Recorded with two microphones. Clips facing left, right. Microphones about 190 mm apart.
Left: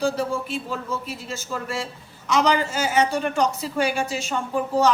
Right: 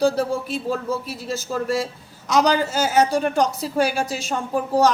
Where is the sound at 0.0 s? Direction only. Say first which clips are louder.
Right 4 dB; 40° right (ahead or behind).